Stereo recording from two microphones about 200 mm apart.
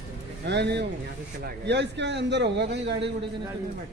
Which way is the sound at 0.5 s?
60° right (ahead or behind).